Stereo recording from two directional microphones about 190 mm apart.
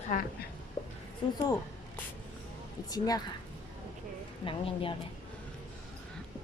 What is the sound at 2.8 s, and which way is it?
Speech, 20° left (ahead or behind).